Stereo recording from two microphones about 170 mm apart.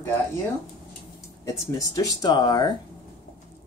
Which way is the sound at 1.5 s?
20° left (ahead or behind).